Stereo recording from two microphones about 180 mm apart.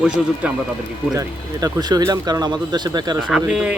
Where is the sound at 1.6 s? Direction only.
20° right (ahead or behind).